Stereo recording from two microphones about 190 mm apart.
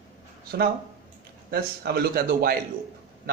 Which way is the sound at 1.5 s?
55° right (ahead or behind).